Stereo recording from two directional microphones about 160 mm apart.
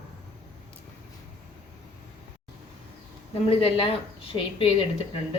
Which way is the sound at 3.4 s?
35° left (ahead or behind).